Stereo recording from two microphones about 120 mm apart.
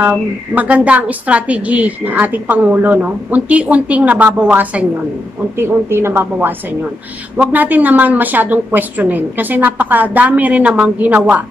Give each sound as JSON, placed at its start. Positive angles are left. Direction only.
{"t": 0.0, "sound": "a woman's voice", "side_deg": -10}